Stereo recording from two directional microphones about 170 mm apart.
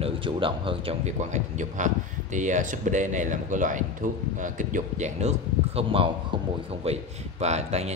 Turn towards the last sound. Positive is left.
turn(degrees=-40)  # may be behind; listen again after turning